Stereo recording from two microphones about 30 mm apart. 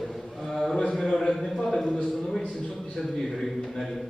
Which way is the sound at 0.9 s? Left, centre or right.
Centre.